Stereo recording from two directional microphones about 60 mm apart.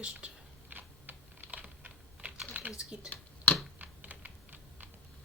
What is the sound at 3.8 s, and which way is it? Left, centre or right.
Typing, right.